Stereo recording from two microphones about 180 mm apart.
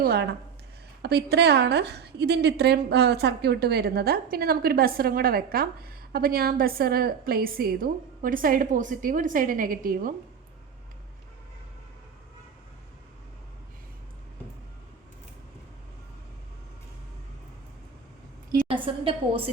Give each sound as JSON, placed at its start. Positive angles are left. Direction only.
{"t": 0.0, "sound": "a woman's voice", "side_deg": -60}
{"t": 18.7, "sound": "a woman's voice", "side_deg": -30}